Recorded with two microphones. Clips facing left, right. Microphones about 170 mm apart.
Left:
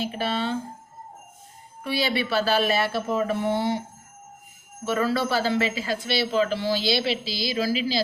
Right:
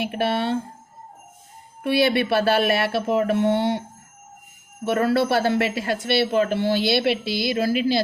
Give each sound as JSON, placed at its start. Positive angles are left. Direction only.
{"t": 0.0, "sound": "a man's voice", "side_deg": -60}
{"t": 1.8, "sound": "a man's voice", "side_deg": -60}
{"t": 4.9, "sound": "a man's voice", "side_deg": -60}